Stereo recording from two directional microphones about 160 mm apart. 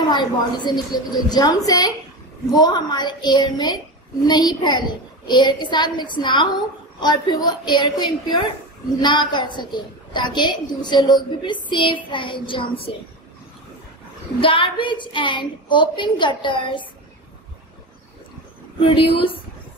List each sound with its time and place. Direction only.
0.1 s a woman's voice: 25° left (ahead or behind)
14.4 s a woman's voice: 35° left (ahead or behind)
18.8 s a woman's voice: 35° left (ahead or behind)